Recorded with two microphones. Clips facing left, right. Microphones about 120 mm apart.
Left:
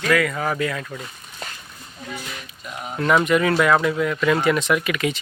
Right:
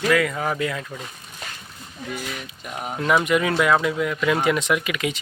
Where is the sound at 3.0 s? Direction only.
10° right (ahead or behind).